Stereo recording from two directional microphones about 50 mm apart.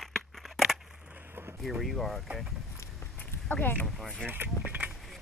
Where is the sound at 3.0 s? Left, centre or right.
Left.